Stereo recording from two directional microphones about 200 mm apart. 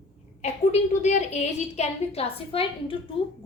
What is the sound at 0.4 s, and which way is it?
A woman's voice, 35° left (ahead or behind).